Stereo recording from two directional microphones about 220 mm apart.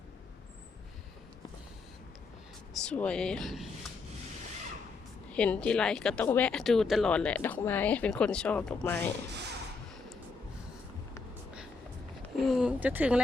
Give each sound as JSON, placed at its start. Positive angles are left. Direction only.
{"t": 2.7, "sound": "speech", "side_deg": 5}
{"t": 5.3, "sound": "speech", "side_deg": 5}
{"t": 9.3, "sound": "a sound", "side_deg": -50}
{"t": 12.5, "sound": "speech", "side_deg": -5}